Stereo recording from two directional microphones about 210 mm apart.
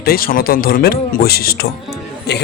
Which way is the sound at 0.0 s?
45° left (ahead or behind).